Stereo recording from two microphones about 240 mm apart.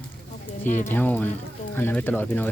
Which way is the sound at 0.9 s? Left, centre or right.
Centre.